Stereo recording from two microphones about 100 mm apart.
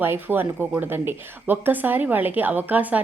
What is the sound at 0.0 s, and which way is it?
Speech, 20° right (ahead or behind).